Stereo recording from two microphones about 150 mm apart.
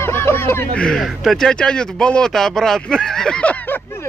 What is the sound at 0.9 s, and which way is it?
Speech, centre (ahead or behind).